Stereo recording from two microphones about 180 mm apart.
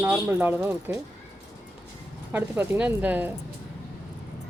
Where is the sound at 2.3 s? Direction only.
10° right (ahead or behind).